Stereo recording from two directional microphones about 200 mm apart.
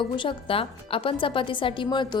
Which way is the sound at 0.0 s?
25° left (ahead or behind).